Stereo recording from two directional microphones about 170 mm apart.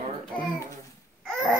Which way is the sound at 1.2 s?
Centre (ahead or behind).